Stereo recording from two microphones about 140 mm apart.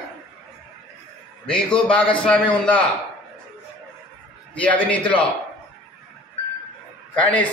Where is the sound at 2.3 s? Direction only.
10° left (ahead or behind).